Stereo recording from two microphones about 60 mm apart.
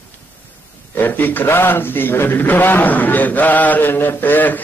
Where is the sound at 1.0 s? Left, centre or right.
Left.